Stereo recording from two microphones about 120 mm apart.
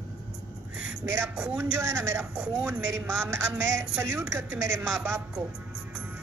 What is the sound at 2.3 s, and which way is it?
Speech, 10° right (ahead or behind).